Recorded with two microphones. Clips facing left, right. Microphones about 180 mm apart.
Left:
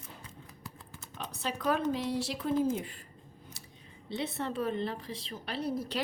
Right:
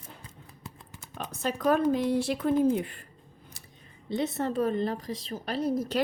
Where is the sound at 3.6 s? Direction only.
55° right (ahead or behind).